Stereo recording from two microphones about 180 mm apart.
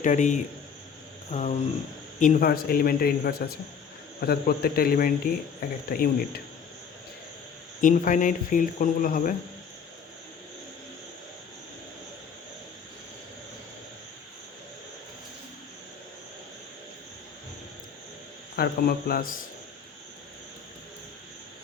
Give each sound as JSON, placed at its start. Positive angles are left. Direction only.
{"t": 0.0, "sound": "speech", "side_deg": 45}
{"t": 7.8, "sound": "speech", "side_deg": 45}
{"t": 18.5, "sound": "speech", "side_deg": 55}